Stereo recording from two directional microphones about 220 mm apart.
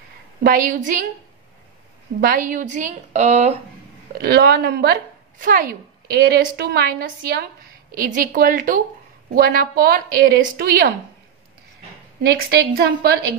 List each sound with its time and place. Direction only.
0.4 s a woman's voice: 40° right (ahead or behind)
2.1 s a woman's voice: 40° right (ahead or behind)
4.2 s a woman's voice: 45° right (ahead or behind)
12.2 s a woman's voice: 45° right (ahead or behind)